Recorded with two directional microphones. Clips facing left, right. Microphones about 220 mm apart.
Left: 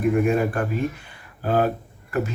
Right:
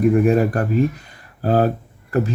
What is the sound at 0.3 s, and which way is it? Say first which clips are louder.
Speech: right 5 dB; 40° right (ahead or behind).